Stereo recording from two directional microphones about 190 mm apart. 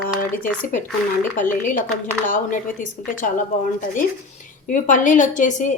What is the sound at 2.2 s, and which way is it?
Speech, 45° left (ahead or behind).